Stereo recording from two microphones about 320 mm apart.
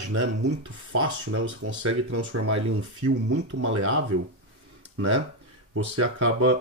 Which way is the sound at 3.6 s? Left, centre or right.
Right.